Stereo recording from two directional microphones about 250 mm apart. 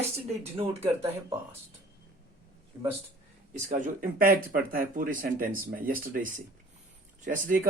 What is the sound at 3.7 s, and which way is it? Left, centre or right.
Speech, right.